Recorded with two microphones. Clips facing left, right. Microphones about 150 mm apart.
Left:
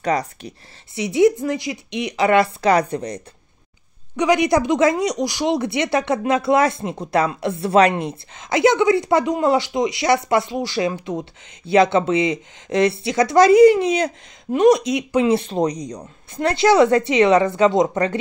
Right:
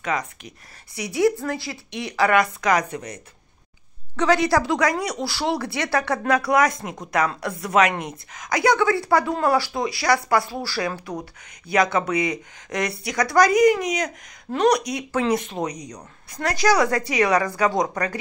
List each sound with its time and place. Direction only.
0.0 s speech: 35° left (ahead or behind)
4.2 s speech: 15° left (ahead or behind)